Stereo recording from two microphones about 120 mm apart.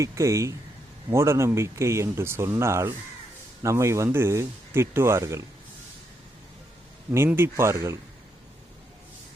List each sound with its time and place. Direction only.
0.0 s speech: 25° right (ahead or behind)
7.3 s speech: 20° right (ahead or behind)